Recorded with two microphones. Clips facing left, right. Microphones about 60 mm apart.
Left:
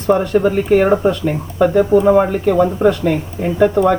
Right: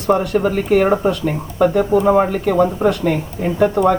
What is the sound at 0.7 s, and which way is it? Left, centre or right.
Speech, centre.